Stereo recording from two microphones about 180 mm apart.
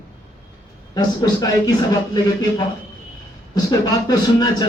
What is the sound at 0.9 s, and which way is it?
A man's voice, 20° left (ahead or behind).